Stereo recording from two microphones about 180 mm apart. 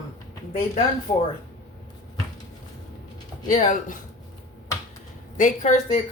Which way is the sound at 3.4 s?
45° left (ahead or behind).